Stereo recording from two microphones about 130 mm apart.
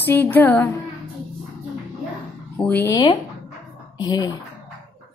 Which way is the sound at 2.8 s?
30° left (ahead or behind).